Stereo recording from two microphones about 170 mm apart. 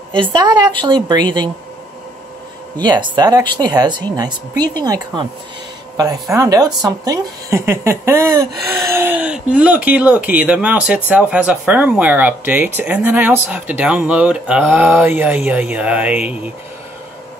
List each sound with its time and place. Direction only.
0.1 s speech: 25° right (ahead or behind)
2.8 s speech: 25° right (ahead or behind)
6.3 s speech: 20° right (ahead or behind)